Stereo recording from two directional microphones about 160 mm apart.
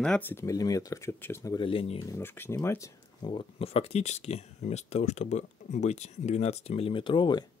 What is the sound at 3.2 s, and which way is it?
Speech, 30° left (ahead or behind).